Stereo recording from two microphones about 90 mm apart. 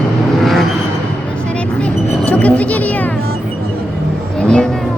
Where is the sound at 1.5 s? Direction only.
15° left (ahead or behind).